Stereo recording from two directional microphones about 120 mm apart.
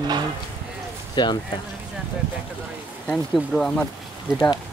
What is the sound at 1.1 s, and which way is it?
Speech, 40° left (ahead or behind).